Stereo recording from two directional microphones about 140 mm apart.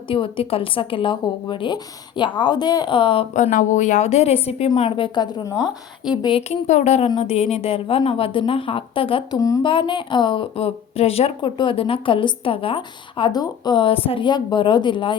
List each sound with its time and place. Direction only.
0.1 s a woman's voice: 40° left (ahead or behind)
3.3 s a woman's voice: 65° left (ahead or behind); by 5.6 s 30° left (ahead or behind)
6.0 s speech: 5° right (ahead or behind)
6.5 s a woman's voice: 55° left (ahead or behind); by 15.1 s 35° left (ahead or behind)